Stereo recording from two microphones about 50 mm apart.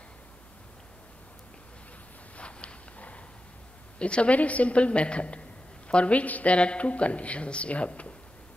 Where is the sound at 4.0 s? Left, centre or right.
Left.